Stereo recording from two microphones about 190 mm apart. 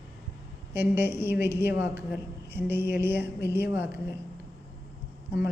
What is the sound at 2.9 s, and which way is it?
Mantra, 60° left (ahead or behind).